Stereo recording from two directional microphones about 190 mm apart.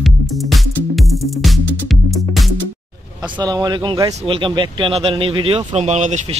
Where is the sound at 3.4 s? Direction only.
20° right (ahead or behind).